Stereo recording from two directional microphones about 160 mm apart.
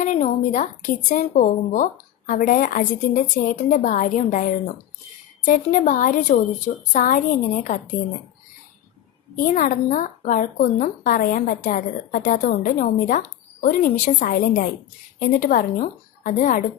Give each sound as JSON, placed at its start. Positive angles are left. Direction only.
{"t": 0.0, "sound": "a woman's voice", "side_deg": 50}
{"t": 9.3, "sound": "a woman's voice", "side_deg": 55}